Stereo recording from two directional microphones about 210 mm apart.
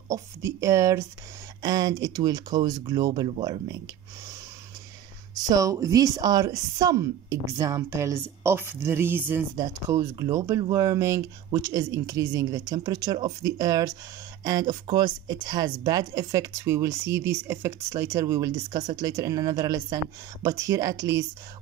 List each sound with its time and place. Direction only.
0.1 s a woman's voice: 15° right (ahead or behind)
5.5 s a woman's voice: 15° right (ahead or behind)